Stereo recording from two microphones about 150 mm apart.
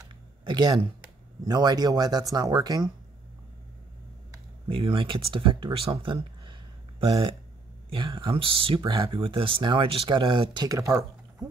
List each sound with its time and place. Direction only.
0.5 s speech: 30° right (ahead or behind)
4.6 s speech: 35° right (ahead or behind)
7.0 s speech: 35° right (ahead or behind)